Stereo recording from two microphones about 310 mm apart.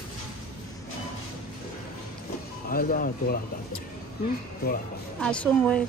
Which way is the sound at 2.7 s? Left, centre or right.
Left.